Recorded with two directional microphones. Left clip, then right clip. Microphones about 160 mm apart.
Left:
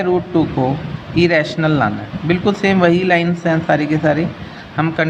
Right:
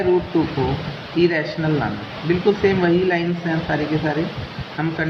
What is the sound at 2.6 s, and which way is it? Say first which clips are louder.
Speech: left 7 dB; 90° left.